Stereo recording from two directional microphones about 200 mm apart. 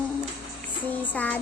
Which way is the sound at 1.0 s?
10° left (ahead or behind).